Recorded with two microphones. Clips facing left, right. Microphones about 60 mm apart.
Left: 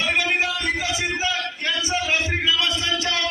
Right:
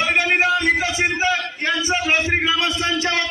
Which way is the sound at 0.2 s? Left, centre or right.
Right.